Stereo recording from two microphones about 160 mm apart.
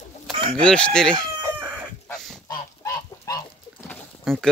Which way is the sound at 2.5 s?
20° left (ahead or behind).